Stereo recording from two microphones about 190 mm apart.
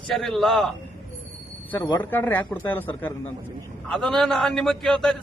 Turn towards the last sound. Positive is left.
turn(degrees=0)  # may be behind; listen again after turning